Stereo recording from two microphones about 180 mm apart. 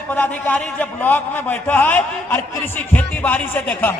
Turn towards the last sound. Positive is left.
turn(degrees=10)  # may be behind; listen again after turning